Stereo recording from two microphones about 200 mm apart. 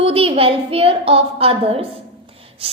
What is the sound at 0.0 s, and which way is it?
Speech, 30° right (ahead or behind).